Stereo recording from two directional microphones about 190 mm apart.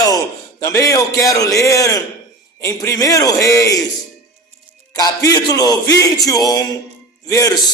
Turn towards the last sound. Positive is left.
turn(degrees=20)  # may be behind; listen again after turning